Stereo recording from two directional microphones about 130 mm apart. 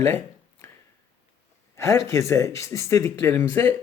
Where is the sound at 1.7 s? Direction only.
20° left (ahead or behind).